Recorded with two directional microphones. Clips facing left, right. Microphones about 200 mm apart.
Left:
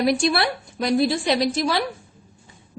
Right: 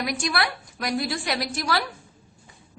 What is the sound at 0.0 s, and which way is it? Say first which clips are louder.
A woman's voice: left 7 dB; 30° left (ahead or behind).